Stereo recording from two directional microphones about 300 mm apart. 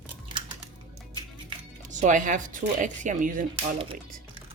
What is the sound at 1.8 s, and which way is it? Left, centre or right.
Speech, right.